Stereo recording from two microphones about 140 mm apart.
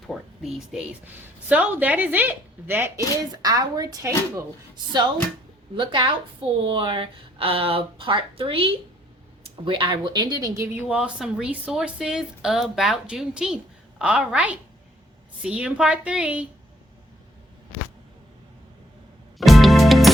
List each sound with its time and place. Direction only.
0.1 s speech: centre (ahead or behind)
1.0 s a woman's voice: 10° right (ahead or behind)
5.7 s a woman's voice: 35° right (ahead or behind)
10.8 s a woman's voice: 5° right (ahead or behind)
19.4 s music: centre (ahead or behind)